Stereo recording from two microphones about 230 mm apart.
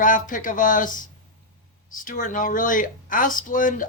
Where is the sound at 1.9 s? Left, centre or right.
Left.